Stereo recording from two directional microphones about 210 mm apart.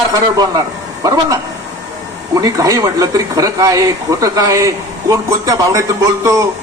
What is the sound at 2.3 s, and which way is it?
A man's voice, 15° right (ahead or behind).